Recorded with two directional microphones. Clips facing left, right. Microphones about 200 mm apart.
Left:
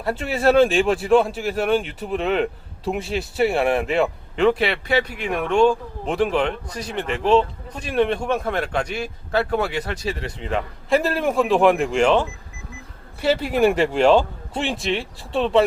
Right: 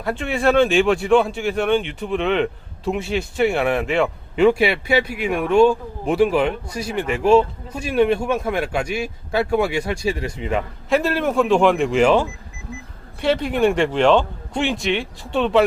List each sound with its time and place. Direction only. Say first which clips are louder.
0.5 s speech: right 1 dB; centre (ahead or behind)
3.3 s speech: even; 35° left (ahead or behind)
3.8 s speech: right 1 dB; centre (ahead or behind)
4.4 s speech: right 3 dB; 10° right (ahead or behind)
10.8 s speech: even; centre (ahead or behind)
13.2 s speech: even; 5° left (ahead or behind)